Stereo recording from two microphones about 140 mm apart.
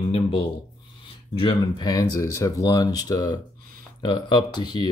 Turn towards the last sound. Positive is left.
turn(degrees=30)  # may be behind; listen again after turning